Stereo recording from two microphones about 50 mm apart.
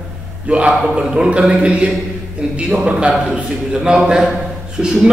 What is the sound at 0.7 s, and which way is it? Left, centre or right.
A man's voice, centre.